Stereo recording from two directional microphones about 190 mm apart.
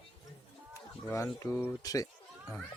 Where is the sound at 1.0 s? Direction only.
15° left (ahead or behind).